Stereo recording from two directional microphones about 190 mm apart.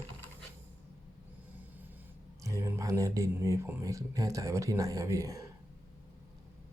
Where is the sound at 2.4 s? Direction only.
15° right (ahead or behind).